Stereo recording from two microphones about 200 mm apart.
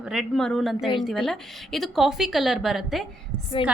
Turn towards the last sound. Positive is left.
turn(degrees=25)  # may be behind; listen again after turning